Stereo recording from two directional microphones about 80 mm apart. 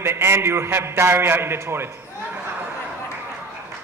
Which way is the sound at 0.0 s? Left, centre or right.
Right.